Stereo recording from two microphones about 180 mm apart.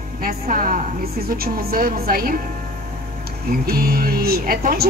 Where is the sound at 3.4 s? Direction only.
55° right (ahead or behind).